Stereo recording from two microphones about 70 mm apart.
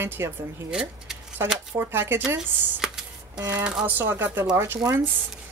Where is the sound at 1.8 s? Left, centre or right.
Right.